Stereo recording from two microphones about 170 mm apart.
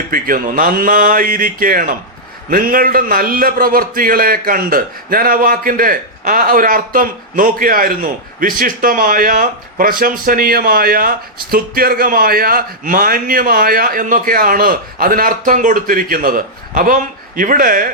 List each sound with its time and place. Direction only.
0.1 s a man's voice: 55° right (ahead or behind)